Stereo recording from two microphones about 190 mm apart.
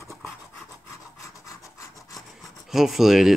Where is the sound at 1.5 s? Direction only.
15° left (ahead or behind).